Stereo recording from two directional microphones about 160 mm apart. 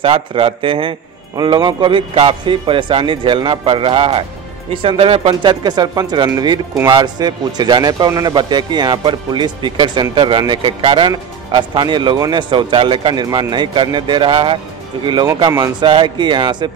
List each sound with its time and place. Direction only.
0.0 s a man's voice: 35° right (ahead or behind)